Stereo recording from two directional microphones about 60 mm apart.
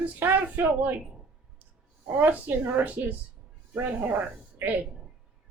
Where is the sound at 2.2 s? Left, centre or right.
Right.